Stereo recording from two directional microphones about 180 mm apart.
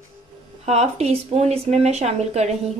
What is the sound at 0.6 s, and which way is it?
Speech, 35° right (ahead or behind).